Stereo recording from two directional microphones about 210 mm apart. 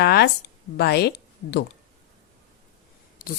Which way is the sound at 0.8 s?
50° left (ahead or behind).